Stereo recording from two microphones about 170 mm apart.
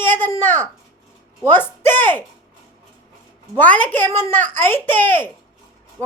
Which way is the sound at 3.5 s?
10° left (ahead or behind).